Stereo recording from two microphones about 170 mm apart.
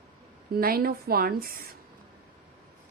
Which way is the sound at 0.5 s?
60° right (ahead or behind).